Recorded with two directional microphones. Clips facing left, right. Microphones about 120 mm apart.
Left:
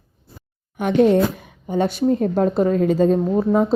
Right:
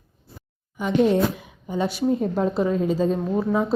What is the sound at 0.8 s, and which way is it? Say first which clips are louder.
Speech: left 4 dB; 60° left (ahead or behind).